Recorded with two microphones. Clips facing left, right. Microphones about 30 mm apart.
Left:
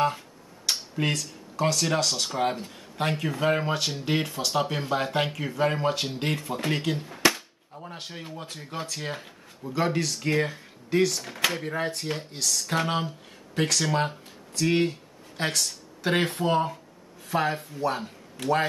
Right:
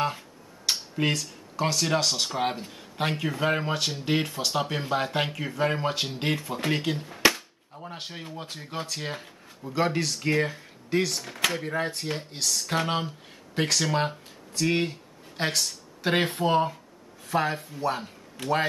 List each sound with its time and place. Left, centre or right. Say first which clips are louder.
0.7 s speech: right 1 dB; centre
7.3 s cap gun: even; centre
8.4 s speech: right 1 dB; centre
9.2 s a sound: left 1 dB; centre
9.8 s speech: even; centre
16.2 s speech: right 1 dB; right
16.4 s a man's voice: right 1 dB; centre